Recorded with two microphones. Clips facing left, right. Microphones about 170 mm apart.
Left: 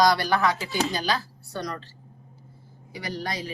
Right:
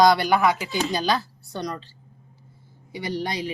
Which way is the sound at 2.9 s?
25° right (ahead or behind).